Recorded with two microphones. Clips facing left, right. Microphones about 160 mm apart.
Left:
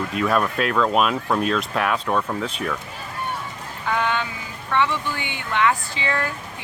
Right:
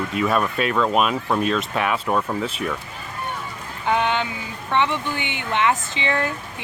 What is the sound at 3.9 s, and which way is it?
Speech, 20° right (ahead or behind).